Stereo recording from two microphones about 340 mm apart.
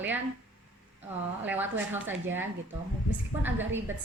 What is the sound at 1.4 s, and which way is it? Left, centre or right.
A woman's voice, centre.